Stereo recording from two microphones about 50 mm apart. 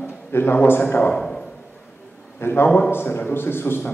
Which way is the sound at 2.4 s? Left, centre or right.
Left.